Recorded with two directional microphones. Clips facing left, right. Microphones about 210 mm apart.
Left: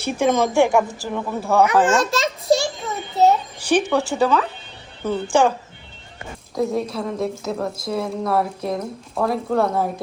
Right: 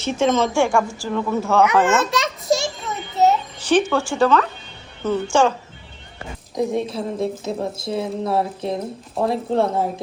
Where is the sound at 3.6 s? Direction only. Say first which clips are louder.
Right 4 dB; 10° left (ahead or behind).